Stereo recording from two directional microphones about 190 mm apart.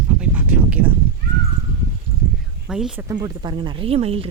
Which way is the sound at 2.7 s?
5° right (ahead or behind).